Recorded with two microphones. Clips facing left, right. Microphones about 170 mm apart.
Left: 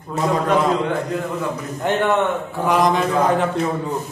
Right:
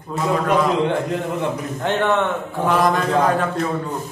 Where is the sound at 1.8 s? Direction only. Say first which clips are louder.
Left 1 dB; 5° left (ahead or behind).